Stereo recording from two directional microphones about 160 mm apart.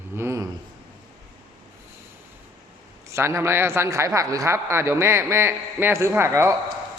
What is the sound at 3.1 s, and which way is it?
Speech, 20° right (ahead or behind).